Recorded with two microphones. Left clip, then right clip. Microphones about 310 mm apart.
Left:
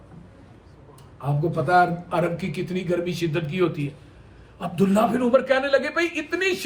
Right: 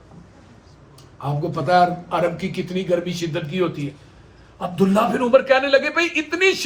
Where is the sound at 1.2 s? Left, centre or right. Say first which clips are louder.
Right 1 dB; centre.